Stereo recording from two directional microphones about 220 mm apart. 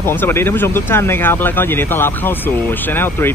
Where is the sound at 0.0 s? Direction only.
10° left (ahead or behind).